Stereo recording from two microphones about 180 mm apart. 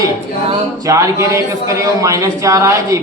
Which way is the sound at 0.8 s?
15° right (ahead or behind).